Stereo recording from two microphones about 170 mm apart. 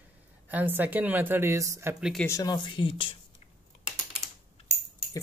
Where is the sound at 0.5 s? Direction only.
10° right (ahead or behind).